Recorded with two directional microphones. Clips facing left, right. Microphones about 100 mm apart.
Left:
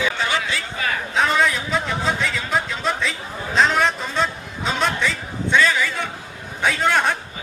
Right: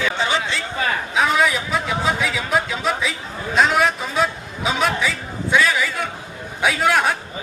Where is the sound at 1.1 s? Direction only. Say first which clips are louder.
Right 1 dB; 5° right (ahead or behind).